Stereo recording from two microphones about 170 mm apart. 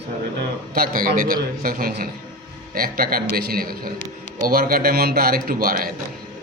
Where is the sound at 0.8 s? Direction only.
55° right (ahead or behind).